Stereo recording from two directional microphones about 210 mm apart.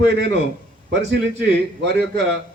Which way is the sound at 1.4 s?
55° right (ahead or behind).